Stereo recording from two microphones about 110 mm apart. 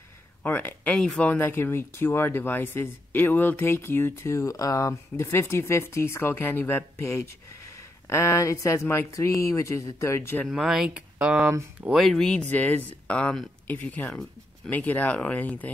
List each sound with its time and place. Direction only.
0.4 s speech: 15° left (ahead or behind)
1.3 s speech: 20° left (ahead or behind)
10.5 s speech: 5° right (ahead or behind)
11.4 s speech: 25° right (ahead or behind)
11.9 s speech: centre (ahead or behind)